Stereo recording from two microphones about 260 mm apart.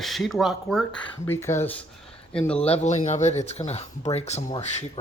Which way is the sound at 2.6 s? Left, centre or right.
Left.